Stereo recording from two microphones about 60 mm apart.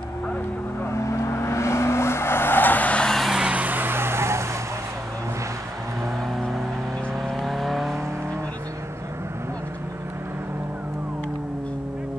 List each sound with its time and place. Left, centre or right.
0.9 s vehicle: left
3.1 s vehicle: centre
3.3 s vehicle: right
7.2 s vehicle: centre